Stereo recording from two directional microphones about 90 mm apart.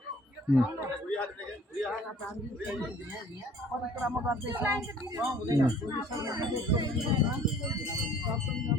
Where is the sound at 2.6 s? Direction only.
15° right (ahead or behind).